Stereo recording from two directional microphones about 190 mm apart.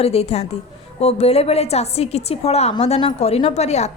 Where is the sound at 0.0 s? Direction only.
35° left (ahead or behind).